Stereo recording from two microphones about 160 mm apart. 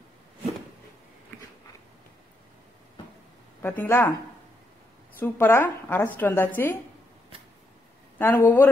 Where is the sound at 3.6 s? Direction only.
10° left (ahead or behind).